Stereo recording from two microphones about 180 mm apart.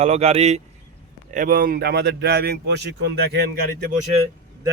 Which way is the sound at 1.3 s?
50° right (ahead or behind).